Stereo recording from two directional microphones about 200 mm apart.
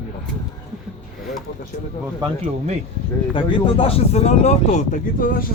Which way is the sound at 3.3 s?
25° left (ahead or behind).